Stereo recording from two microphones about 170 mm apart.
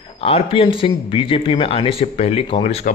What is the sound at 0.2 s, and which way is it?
Speech, 35° left (ahead or behind).